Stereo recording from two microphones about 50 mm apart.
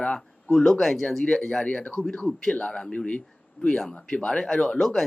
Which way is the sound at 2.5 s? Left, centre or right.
Centre.